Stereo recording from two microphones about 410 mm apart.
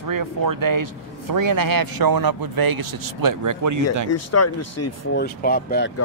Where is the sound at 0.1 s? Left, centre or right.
Right.